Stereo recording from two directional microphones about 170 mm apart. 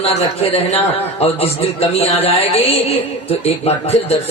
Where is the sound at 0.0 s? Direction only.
35° left (ahead or behind).